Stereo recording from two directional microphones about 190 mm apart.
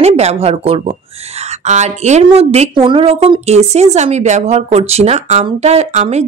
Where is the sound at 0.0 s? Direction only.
35° right (ahead or behind).